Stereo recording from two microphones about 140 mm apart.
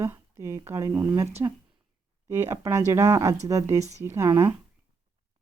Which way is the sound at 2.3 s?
20° right (ahead or behind).